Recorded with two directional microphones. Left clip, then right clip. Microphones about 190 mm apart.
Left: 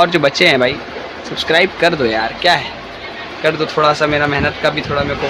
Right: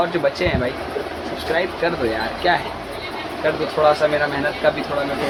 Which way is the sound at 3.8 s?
55° left (ahead or behind).